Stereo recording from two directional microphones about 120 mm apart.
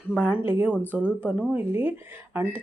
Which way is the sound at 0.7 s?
15° left (ahead or behind).